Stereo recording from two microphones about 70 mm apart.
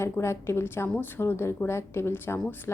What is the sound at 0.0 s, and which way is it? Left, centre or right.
A woman's voice, left.